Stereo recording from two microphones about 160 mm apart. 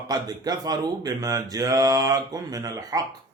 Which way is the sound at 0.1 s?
25° right (ahead or behind).